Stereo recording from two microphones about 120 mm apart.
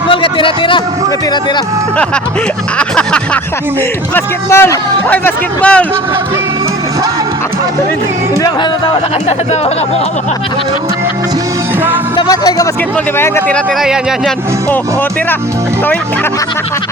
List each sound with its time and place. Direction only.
0.1 s a man's voice: 45° left (ahead or behind)
2.7 s music: 5° left (ahead or behind)
4.1 s speech: 20° left (ahead or behind)
12.1 s speech: 35° left (ahead or behind)
13.1 s speech: 20° left (ahead or behind)
13.8 s speech: 5° right (ahead or behind)